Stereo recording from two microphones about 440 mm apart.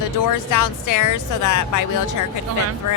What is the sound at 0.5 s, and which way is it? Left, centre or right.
Speech, left.